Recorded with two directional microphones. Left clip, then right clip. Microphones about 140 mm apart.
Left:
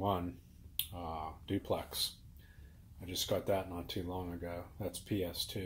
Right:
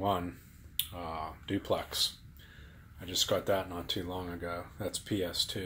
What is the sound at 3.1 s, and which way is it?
Speech, 10° left (ahead or behind).